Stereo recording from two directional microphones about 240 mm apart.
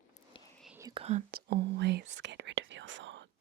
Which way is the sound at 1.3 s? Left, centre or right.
Right.